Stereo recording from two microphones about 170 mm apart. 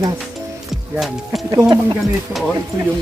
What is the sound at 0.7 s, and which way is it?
Music, centre (ahead or behind).